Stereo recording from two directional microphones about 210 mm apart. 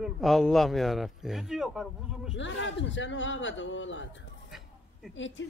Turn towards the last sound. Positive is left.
turn(degrees=60)  # may be behind; listen again after turning